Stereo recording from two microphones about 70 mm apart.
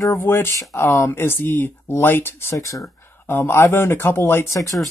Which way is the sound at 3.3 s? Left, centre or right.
Left.